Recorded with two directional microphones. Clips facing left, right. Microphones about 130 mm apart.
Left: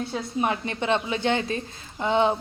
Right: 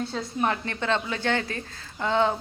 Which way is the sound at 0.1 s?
20° left (ahead or behind).